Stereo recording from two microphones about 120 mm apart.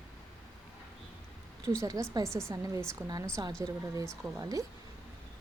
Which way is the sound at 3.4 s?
35° right (ahead or behind).